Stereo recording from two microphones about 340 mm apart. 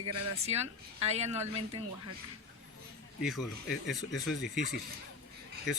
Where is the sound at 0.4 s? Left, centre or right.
Centre.